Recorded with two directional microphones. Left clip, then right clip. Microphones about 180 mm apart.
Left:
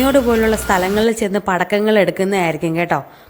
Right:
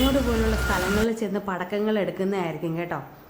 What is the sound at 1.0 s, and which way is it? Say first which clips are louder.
A woman's voice: left 9 dB; 40° left (ahead or behind).